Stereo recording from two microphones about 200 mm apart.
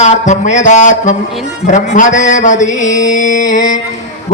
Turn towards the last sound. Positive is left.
turn(degrees=40)  # may be behind; listen again after turning